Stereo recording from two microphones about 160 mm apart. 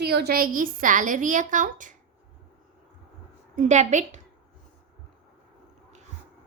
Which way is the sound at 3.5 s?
45° right (ahead or behind).